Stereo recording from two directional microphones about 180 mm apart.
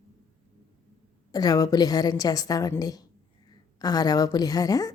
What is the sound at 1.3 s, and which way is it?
A woman's voice, 20° left (ahead or behind).